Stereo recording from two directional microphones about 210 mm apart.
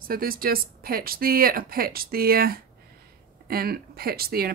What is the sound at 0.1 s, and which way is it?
Speech, 45° right (ahead or behind).